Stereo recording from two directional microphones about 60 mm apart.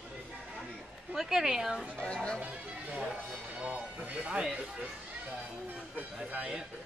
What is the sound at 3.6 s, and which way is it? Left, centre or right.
Speech, centre.